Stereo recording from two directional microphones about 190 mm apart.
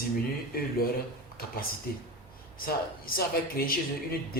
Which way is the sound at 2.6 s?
50° left (ahead or behind).